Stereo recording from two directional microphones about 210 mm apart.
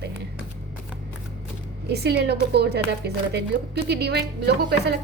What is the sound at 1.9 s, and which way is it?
A woman's voice, 50° right (ahead or behind).